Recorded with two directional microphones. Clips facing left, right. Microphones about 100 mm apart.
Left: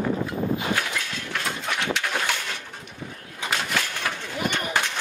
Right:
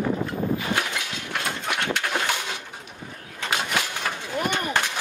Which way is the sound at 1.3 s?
5° right (ahead or behind).